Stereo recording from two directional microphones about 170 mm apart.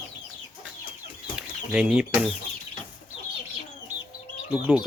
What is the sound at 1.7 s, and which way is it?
Speech, 5° right (ahead or behind).